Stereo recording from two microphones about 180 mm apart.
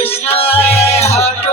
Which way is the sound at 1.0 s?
35° left (ahead or behind).